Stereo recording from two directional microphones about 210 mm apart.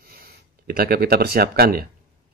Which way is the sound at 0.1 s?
45° right (ahead or behind).